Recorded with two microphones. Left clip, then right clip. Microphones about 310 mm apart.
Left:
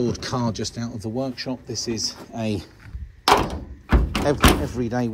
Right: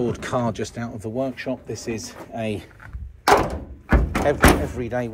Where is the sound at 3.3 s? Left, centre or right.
Centre.